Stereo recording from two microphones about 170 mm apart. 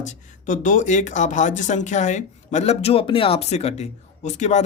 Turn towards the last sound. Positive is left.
turn(degrees=45)  # may be behind; listen again after turning